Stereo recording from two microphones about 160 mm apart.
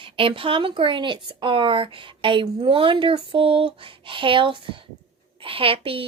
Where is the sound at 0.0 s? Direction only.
35° right (ahead or behind).